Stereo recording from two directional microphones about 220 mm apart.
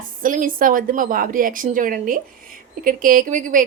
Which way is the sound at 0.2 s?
40° right (ahead or behind).